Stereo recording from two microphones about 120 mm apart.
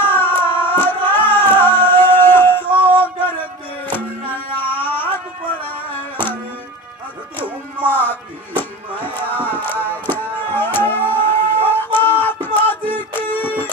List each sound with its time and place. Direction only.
0.0 s music: 15° left (ahead or behind)
7.3 s music: 15° left (ahead or behind)